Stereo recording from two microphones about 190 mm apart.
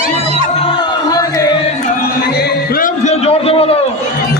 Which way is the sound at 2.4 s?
50° left (ahead or behind).